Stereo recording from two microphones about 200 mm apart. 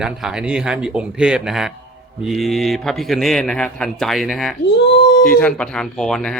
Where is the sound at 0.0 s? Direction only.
5° right (ahead or behind).